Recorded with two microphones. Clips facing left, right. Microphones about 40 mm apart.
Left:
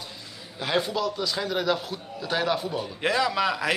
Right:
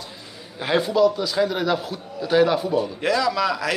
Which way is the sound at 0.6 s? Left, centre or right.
Centre.